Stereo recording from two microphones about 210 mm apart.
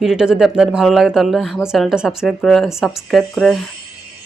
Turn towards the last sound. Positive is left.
turn(degrees=0)  # may be behind; listen again after turning